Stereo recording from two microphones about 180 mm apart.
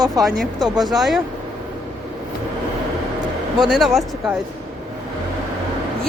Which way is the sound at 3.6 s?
Centre (ahead or behind).